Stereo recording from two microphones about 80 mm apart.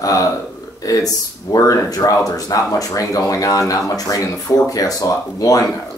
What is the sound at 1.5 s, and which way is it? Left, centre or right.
Speech, left.